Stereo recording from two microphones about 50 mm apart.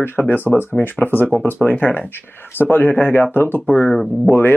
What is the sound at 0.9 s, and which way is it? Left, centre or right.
Speech, left.